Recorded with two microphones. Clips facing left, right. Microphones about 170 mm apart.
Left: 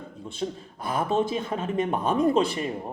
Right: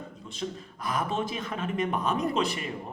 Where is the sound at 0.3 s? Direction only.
30° left (ahead or behind).